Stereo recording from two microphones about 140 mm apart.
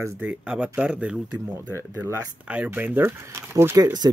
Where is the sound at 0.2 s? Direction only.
10° right (ahead or behind).